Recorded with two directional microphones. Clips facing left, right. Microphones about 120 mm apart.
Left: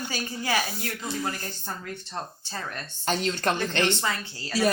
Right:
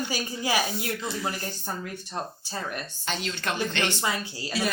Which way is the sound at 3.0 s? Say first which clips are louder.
Left 6 dB; 40° left (ahead or behind).